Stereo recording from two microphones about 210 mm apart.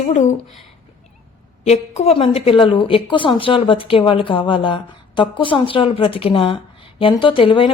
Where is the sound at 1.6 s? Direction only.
30° left (ahead or behind).